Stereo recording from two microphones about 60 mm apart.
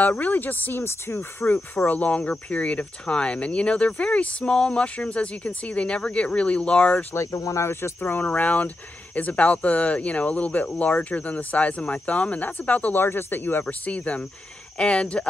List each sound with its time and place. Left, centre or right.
0.0 s speech: left
1.4 s speech: left
7.2 s speech: left
8.0 s speech: left